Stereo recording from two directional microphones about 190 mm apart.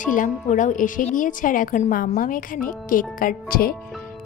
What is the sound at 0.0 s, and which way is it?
A woman's voice, 45° left (ahead or behind).